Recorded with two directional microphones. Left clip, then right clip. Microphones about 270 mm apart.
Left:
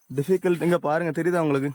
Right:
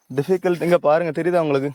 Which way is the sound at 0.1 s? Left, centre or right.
Centre.